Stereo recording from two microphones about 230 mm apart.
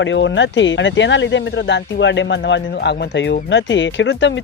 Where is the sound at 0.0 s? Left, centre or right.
Left.